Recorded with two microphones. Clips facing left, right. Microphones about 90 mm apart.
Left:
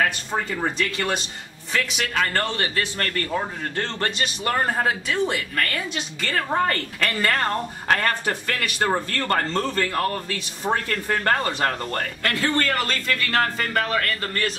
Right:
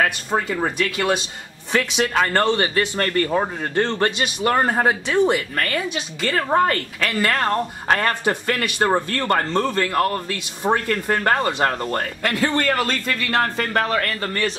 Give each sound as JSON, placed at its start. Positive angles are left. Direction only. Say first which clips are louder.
{"t": 0.3, "sound": "speech", "louder": "right 4 dB", "side_deg": -15}
{"t": 1.7, "sound": "a man's voice", "louder": "right 5 dB", "side_deg": -25}
{"t": 10.6, "sound": "a man's voice", "louder": "right 4 dB", "side_deg": -25}
{"t": 12.2, "sound": "speech", "louder": "right 1 dB", "side_deg": -15}